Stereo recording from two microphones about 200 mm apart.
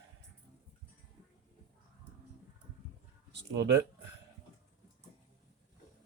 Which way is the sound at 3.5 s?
60° right (ahead or behind).